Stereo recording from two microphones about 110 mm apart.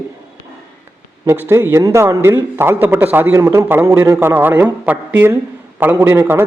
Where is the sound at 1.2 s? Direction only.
20° right (ahead or behind).